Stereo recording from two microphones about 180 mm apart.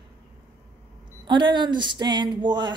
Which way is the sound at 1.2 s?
25° right (ahead or behind).